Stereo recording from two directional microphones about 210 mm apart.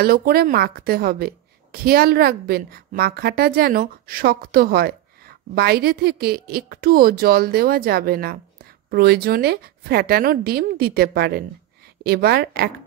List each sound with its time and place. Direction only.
0.0 s a woman's voice: 45° right (ahead or behind)